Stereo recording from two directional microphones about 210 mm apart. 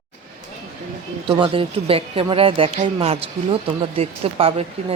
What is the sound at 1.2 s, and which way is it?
Speech, 25° right (ahead or behind).